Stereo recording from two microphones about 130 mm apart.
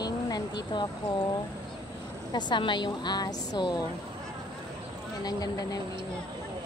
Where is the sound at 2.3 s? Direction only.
35° left (ahead or behind).